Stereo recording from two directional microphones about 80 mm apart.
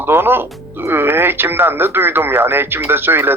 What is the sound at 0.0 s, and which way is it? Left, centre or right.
Speech, right.